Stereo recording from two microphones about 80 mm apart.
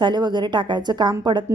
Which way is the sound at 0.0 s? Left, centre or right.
Right.